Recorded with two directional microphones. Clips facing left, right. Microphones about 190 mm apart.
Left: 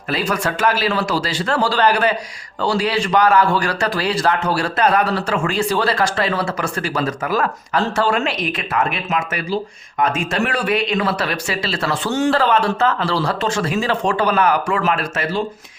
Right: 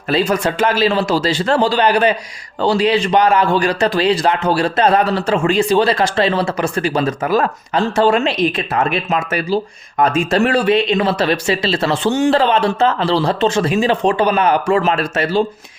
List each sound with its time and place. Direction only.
0.1 s a man's voice: 25° right (ahead or behind)